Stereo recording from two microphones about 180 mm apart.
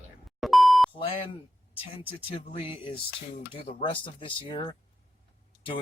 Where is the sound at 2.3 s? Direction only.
30° left (ahead or behind).